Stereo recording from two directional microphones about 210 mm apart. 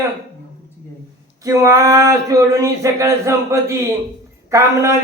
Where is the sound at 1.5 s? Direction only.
15° right (ahead or behind).